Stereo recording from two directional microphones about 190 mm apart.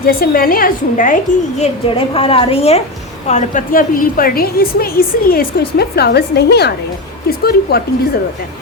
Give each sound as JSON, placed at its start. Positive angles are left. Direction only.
{"t": 0.0, "sound": "a woman's voice", "side_deg": 50}